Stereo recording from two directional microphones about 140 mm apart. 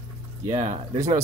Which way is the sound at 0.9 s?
25° right (ahead or behind).